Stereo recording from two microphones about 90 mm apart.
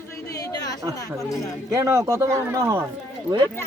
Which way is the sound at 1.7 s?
30° right (ahead or behind).